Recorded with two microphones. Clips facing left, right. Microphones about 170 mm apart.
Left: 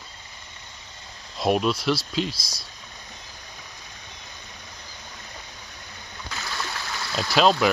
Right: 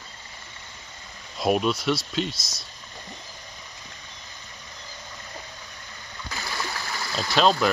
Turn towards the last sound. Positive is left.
turn(degrees=5)  # may be behind; listen again after turning